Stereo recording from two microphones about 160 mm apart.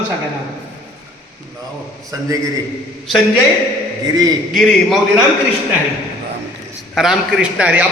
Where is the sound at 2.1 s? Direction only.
20° right (ahead or behind).